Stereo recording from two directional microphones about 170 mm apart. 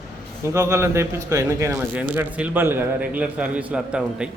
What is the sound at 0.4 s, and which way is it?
Speech, 15° right (ahead or behind).